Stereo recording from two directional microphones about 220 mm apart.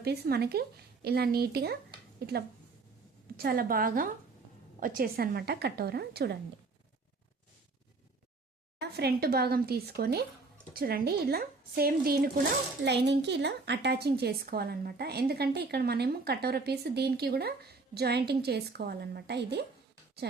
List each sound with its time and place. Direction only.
0.0 s a woman's voice: 45° right (ahead or behind)
8.8 s a woman's voice: 45° right (ahead or behind)